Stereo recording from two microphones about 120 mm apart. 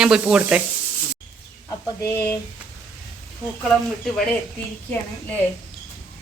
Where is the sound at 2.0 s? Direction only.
25° left (ahead or behind).